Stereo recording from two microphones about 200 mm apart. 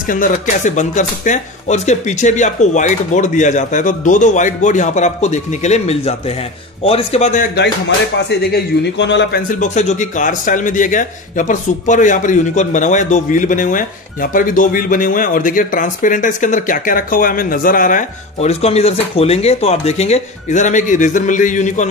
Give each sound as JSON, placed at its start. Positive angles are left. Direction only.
{"t": 0.0, "sound": "speech", "side_deg": 45}
{"t": 8.3, "sound": "a man's voice", "side_deg": 55}
{"t": 9.5, "sound": "speech", "side_deg": 35}